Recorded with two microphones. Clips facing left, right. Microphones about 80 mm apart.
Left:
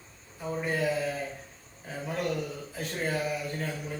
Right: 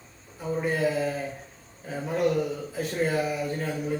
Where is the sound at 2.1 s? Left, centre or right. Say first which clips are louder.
Right 7 dB; centre.